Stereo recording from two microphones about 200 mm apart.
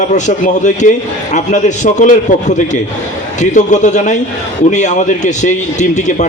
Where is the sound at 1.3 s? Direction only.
40° left (ahead or behind).